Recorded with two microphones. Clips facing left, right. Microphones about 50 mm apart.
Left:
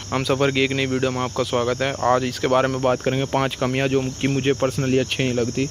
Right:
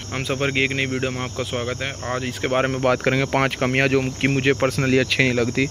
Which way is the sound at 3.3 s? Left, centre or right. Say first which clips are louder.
Right 1 dB; right.